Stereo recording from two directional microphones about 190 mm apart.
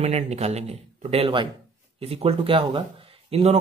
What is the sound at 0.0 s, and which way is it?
Speech, 35° right (ahead or behind).